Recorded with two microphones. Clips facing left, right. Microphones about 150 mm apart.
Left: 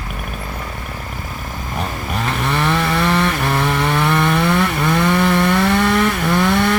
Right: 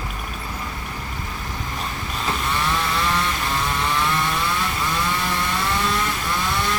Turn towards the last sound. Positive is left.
turn(degrees=65)  # may be behind; listen again after turning